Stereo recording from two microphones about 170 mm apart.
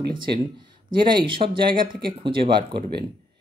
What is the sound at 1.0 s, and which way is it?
Speech, 30° right (ahead or behind).